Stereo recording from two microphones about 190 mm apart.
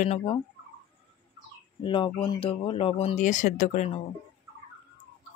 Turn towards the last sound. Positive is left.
turn(degrees=40)  # may be behind; listen again after turning